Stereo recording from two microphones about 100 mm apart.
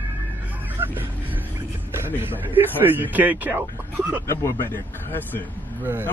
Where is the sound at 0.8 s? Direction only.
20° right (ahead or behind).